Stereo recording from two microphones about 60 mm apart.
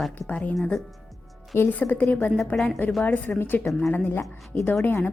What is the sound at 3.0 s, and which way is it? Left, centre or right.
A woman's voice, left.